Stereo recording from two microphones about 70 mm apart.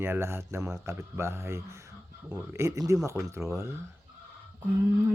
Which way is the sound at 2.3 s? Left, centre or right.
Right.